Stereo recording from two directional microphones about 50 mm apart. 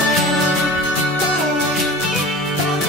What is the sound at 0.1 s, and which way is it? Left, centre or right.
Music, centre.